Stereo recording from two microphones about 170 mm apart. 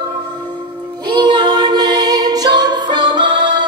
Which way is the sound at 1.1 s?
25° right (ahead or behind).